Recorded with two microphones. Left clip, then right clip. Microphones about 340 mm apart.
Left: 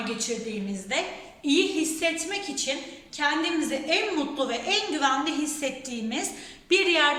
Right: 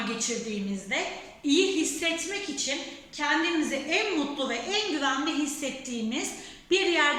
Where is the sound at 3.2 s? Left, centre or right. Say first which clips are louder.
Left 1 dB; left.